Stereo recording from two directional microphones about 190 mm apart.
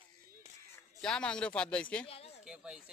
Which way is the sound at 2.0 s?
30° left (ahead or behind).